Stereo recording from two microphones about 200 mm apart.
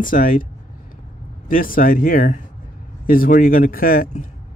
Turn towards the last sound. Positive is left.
turn(degrees=45)  # may be behind; listen again after turning